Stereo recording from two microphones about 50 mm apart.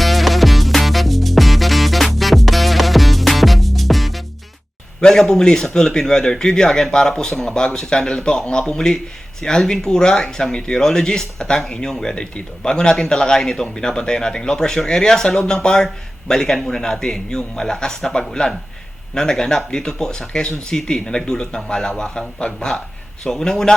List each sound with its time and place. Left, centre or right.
0.0 s music: centre
4.9 s speech: centre